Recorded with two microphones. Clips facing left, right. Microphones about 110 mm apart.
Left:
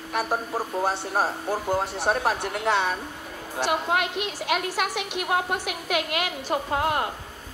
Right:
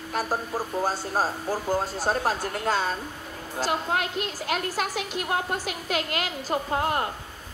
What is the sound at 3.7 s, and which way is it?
A woman's voice, 5° left (ahead or behind).